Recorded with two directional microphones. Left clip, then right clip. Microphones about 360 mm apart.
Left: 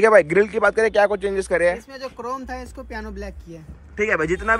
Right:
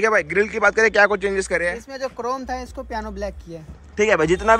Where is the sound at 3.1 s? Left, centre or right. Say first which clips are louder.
Right 6 dB; centre.